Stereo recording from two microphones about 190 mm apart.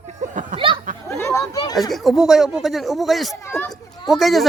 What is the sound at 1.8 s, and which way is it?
Speech, centre (ahead or behind).